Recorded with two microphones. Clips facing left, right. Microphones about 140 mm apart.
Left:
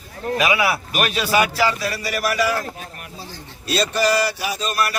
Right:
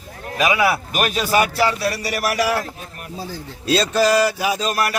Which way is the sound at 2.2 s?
80° right.